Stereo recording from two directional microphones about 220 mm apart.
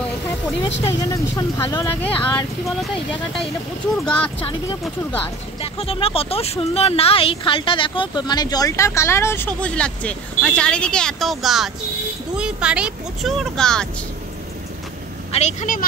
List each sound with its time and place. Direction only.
1.0 s speech: 15° left (ahead or behind)
3.9 s speech: 5° left (ahead or behind)
5.6 s speech: 25° left (ahead or behind); by 13.8 s 5° left (ahead or behind)
15.3 s a woman's voice: 35° left (ahead or behind)